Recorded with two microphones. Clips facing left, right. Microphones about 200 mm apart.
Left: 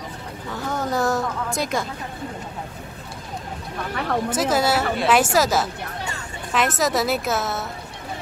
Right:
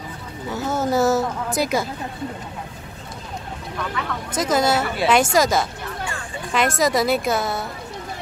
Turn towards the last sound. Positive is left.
turn(degrees=0)  # may be behind; listen again after turning